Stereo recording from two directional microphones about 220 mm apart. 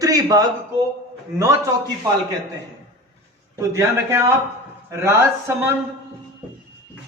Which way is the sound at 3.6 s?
10° right (ahead or behind).